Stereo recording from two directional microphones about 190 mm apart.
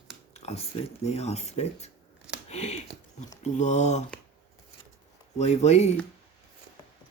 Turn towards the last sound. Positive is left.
turn(degrees=35)  # may be behind; listen again after turning